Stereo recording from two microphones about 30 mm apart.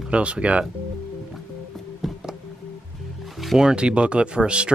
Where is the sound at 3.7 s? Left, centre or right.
Right.